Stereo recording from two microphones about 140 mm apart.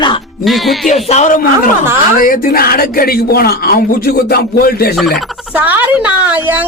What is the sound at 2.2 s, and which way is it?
Speech, 85° left.